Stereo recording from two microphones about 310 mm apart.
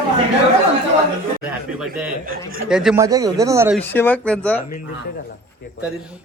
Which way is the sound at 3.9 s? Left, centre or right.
Centre.